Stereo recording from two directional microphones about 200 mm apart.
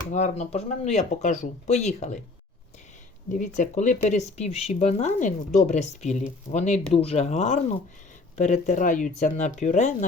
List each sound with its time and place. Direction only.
0.1 s speech: 35° left (ahead or behind)
3.3 s speech: 40° left (ahead or behind)